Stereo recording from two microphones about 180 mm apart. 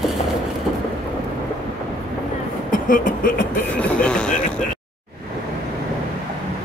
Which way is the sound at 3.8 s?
5° left (ahead or behind).